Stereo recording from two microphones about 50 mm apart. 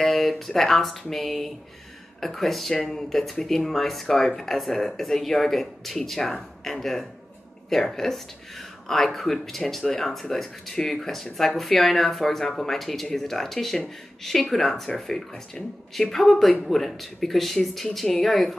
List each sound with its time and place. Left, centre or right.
0.0 s speech: centre